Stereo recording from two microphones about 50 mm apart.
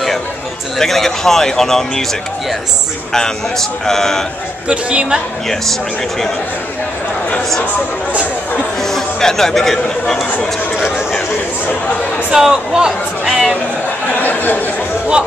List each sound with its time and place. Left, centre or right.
0.7 s speech: centre
3.1 s speech: centre
4.6 s speech: centre
8.8 s speech: centre
12.3 s speech: centre
14.2 s a sound: left